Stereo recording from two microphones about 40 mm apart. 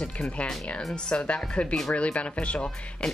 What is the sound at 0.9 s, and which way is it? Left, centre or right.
Speech, centre.